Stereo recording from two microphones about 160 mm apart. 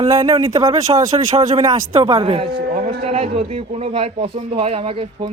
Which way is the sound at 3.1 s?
35° right (ahead or behind).